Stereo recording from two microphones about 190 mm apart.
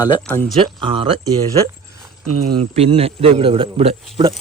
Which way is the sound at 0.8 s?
25° right (ahead or behind).